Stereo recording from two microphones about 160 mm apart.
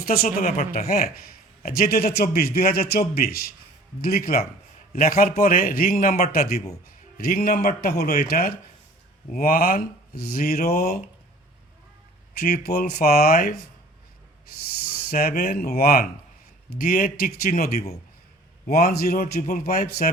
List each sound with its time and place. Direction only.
0.0 s a man's voice: 65° left (ahead or behind)
12.4 s speech: 75° left (ahead or behind)
15.1 s speech: 65° left (ahead or behind)